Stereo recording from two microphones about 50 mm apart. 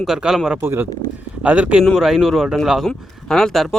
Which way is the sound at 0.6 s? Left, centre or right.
Right.